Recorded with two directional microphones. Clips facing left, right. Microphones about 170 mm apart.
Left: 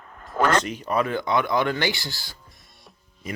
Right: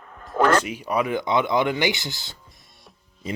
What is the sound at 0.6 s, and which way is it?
Speech, 10° right (ahead or behind).